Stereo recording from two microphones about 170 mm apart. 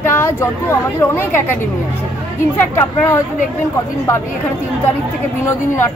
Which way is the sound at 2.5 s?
10° left (ahead or behind).